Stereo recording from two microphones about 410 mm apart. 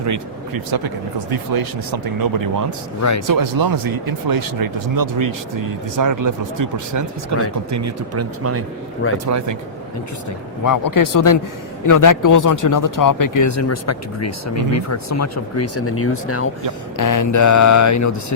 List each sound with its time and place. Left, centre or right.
0.0 s speech: right
10.6 s mantra: left
11.9 s speech: left
17.0 s mantra: left